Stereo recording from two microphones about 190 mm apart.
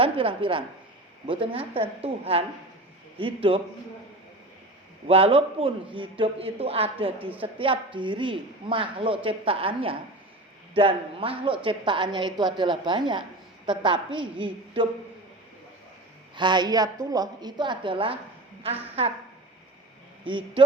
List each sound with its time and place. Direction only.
0.0 s a woman's voice: 30° right (ahead or behind)
5.0 s a woman's voice: 30° right (ahead or behind)
16.3 s a woman's voice: 25° right (ahead or behind)